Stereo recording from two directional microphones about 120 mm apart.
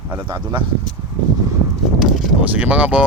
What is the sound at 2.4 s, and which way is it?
Speech, 10° right (ahead or behind).